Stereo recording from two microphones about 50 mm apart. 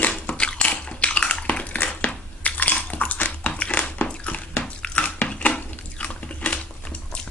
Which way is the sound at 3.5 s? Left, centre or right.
Left.